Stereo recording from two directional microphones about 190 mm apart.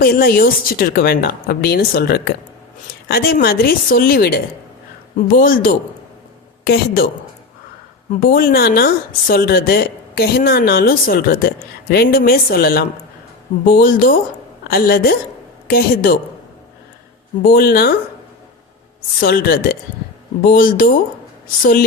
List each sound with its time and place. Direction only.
0.0 s a woman's voice: 50° left (ahead or behind)
5.4 s a woman's voice: 50° left (ahead or behind)
8.3 s a woman's voice: 50° left (ahead or behind)
17.5 s speech: 55° left (ahead or behind)
19.2 s a woman's voice: 55° left (ahead or behind)